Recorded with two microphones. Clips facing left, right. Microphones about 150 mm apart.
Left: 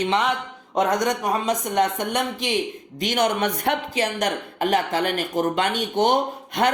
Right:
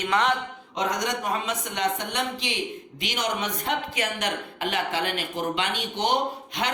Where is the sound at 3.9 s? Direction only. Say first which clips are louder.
Left 6 dB; 30° left (ahead or behind).